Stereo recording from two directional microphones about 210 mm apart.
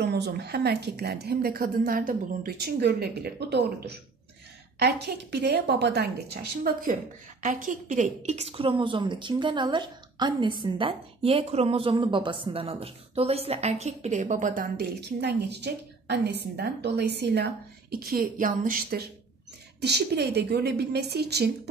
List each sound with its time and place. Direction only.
0.0 s a woman's voice: 50° right (ahead or behind)